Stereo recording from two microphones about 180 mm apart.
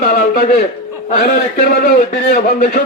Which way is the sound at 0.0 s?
50° left (ahead or behind).